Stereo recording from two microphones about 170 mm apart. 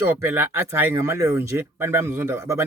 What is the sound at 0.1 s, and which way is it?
Speech, 10° right (ahead or behind).